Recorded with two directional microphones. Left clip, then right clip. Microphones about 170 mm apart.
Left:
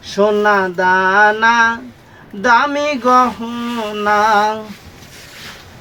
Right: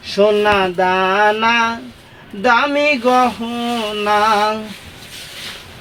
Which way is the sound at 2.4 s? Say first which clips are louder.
Left 1 dB; 15° right (ahead or behind).